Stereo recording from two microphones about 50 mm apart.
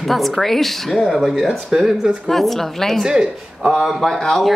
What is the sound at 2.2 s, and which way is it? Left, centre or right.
Speech, centre.